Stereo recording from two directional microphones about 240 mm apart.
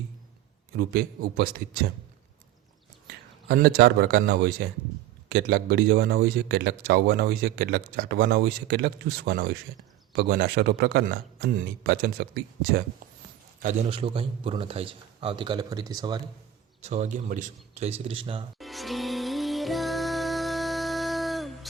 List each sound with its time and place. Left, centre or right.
0.8 s a man's voice: right
3.5 s a man's voice: right
13.8 s a man's voice: right
16.8 s a man's voice: right
18.6 s music: centre